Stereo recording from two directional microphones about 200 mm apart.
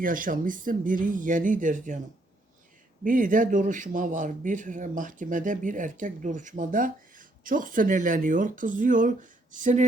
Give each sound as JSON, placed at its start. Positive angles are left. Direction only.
{"t": 0.0, "sound": "speech", "side_deg": -45}
{"t": 3.0, "sound": "a man's voice", "side_deg": -40}